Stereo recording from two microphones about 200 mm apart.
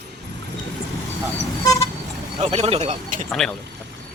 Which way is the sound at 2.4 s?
30° right (ahead or behind).